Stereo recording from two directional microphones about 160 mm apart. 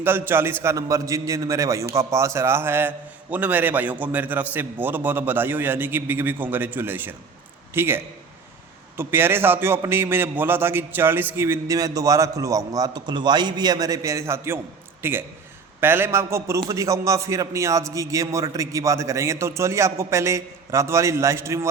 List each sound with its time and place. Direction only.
0.0 s a man's voice: 15° right (ahead or behind)